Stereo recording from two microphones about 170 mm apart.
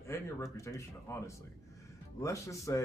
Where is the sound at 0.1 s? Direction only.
15° left (ahead or behind).